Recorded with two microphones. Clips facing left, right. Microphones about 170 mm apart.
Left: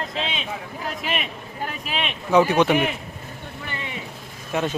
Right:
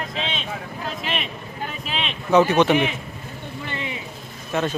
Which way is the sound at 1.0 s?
5° left (ahead or behind).